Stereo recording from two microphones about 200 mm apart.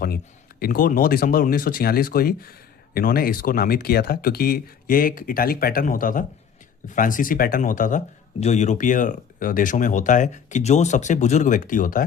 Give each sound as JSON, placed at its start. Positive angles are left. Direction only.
{"t": 0.6, "sound": "speech", "side_deg": 45}